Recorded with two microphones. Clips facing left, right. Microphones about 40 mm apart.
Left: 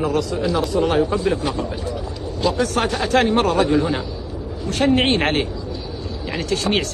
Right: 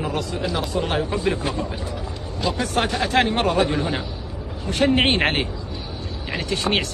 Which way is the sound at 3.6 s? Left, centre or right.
Right.